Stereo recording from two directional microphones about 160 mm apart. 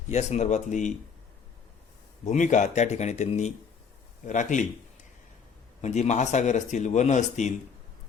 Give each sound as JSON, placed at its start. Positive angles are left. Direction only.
{"t": 0.1, "sound": "speech", "side_deg": 45}
{"t": 2.2, "sound": "speech", "side_deg": 50}
{"t": 5.8, "sound": "speech", "side_deg": 45}